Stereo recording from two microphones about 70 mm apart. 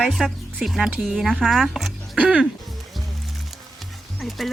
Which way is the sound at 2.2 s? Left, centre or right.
Centre.